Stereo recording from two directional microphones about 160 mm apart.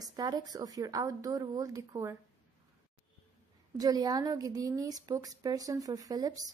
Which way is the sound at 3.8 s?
25° right (ahead or behind).